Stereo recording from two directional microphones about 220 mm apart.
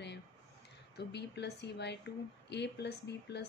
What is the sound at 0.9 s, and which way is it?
Speech, 50° left (ahead or behind).